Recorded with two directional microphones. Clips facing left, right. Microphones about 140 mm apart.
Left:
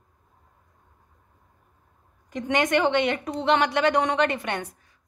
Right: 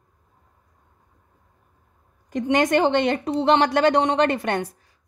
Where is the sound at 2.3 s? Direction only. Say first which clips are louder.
Right 4 dB; 40° right (ahead or behind).